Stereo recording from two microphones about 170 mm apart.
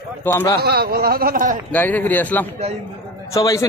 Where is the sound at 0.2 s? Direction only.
15° left (ahead or behind).